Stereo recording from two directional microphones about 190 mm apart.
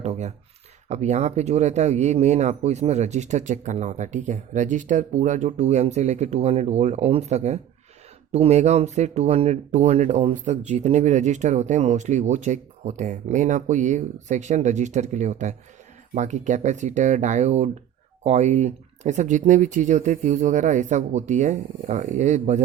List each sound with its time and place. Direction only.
0.0 s speech: 35° right (ahead or behind)